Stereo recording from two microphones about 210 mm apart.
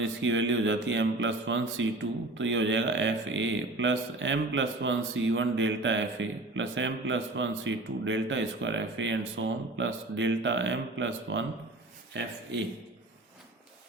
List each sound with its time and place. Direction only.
0.0 s speech: 60° right (ahead or behind)